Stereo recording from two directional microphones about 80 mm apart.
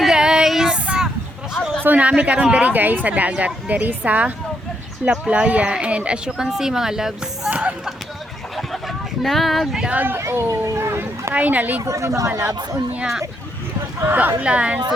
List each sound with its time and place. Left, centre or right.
0.0 s child singing: centre
1.8 s speech: centre
5.3 s speech: centre
7.5 s a sound: centre
9.2 s speech: centre
9.9 s speech: right
10.2 s speech: right
11.3 s speech: right
11.9 s speech: right
14.0 s speech: right
14.4 s speech: centre